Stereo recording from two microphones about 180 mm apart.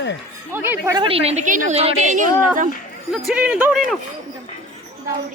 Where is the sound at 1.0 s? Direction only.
30° right (ahead or behind).